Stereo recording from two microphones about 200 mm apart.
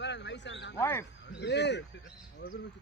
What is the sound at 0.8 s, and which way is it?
Speech, 10° left (ahead or behind).